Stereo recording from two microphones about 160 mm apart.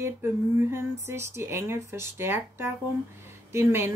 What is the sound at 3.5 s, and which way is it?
Speech, 15° right (ahead or behind).